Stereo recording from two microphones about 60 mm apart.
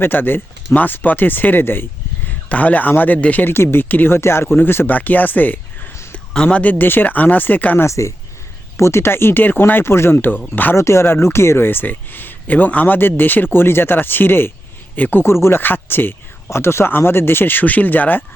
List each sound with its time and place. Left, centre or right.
0.0 s speech: left
2.5 s speech: left
3.4 s speech: left
4.2 s speech: left
6.3 s speech: centre
7.9 s speech: left
10.8 s a man's voice: left
15.2 s speech: left